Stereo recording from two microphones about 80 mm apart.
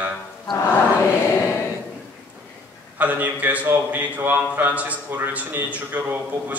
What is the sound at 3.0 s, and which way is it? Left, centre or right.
A man's voice, right.